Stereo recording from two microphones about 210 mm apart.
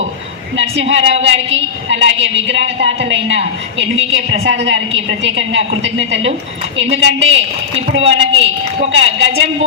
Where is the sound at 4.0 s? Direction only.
30° right (ahead or behind).